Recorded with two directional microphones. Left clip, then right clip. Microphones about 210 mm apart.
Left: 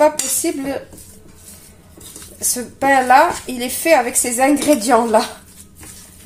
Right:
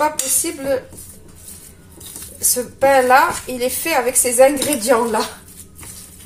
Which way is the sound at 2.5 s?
45° left (ahead or behind).